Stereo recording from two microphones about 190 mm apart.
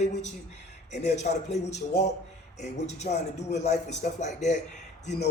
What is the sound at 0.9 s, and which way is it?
Speech, 35° left (ahead or behind).